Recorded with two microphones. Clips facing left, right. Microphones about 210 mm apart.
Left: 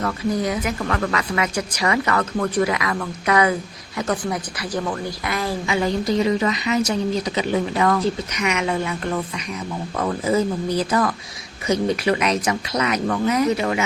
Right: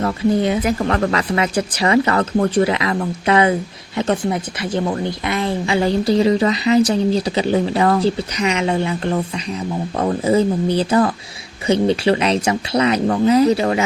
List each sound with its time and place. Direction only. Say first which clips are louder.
0.0 s a woman's voice: right 5 dB; 25° right (ahead or behind)